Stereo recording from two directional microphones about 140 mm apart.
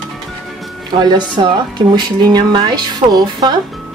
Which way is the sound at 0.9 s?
30° right (ahead or behind).